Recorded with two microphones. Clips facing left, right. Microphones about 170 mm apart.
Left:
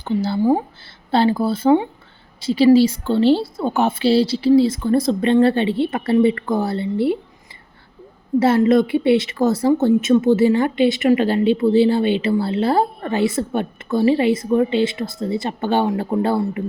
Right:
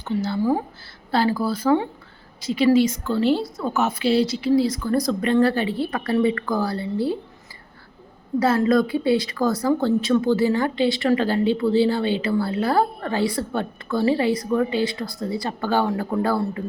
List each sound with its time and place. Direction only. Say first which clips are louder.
0.0 s a woman's voice: left 4 dB; 30° left (ahead or behind)
8.4 s a woman's voice: left 4 dB; 25° left (ahead or behind)